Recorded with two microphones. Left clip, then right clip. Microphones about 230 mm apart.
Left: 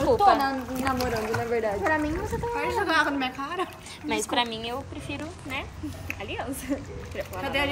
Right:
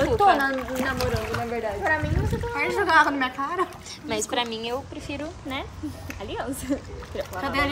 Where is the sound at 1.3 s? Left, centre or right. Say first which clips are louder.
Left 2 dB; left.